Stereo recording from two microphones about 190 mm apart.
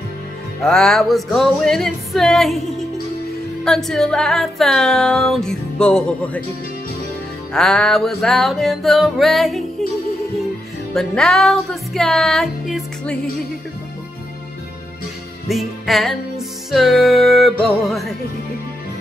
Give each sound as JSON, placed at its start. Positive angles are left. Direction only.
{"t": 0.6, "sound": "music", "side_deg": 0}
{"t": 3.6, "sound": "music", "side_deg": 0}
{"t": 7.5, "sound": "music", "side_deg": 5}
{"t": 11.0, "sound": "music", "side_deg": 5}
{"t": 15.4, "sound": "music", "side_deg": 0}